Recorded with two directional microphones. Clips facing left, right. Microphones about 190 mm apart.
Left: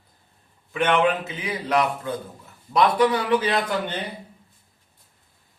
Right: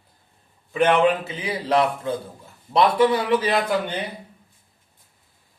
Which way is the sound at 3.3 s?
10° right (ahead or behind).